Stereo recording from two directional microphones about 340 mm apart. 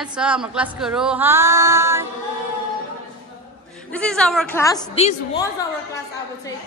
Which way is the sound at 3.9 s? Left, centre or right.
Centre.